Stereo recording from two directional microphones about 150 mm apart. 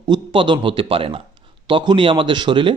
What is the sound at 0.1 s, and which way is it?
A man's voice, 35° right (ahead or behind).